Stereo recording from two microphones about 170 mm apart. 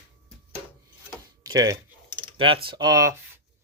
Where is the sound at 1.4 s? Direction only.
25° right (ahead or behind).